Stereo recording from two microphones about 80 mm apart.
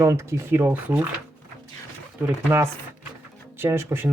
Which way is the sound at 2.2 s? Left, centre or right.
Right.